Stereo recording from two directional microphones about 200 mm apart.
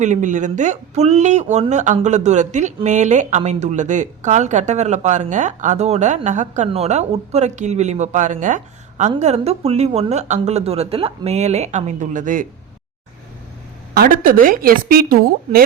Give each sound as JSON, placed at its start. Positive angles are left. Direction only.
{"t": 0.0, "sound": "speech", "side_deg": -40}
{"t": 13.9, "sound": "a woman's voice", "side_deg": -45}